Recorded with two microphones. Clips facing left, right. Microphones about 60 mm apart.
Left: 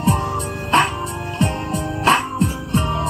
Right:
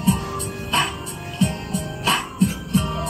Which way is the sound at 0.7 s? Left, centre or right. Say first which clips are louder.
Left 7 dB; left.